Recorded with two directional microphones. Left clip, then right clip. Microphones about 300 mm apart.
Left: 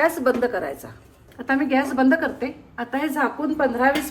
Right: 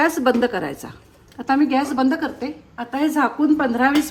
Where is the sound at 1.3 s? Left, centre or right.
Centre.